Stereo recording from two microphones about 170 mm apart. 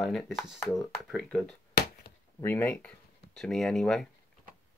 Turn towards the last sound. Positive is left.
turn(degrees=0)  # may be behind; listen again after turning